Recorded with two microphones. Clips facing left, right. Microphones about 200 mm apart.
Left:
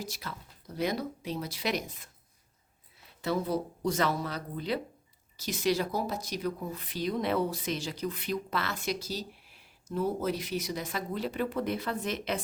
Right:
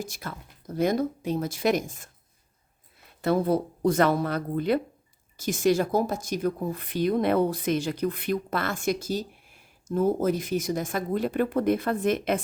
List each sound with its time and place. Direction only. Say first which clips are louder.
0.0 s speech: right 4 dB; 50° right (ahead or behind)
3.1 s speech: right 7 dB; 55° right (ahead or behind)